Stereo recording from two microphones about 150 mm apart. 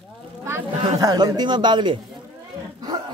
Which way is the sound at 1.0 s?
25° right (ahead or behind).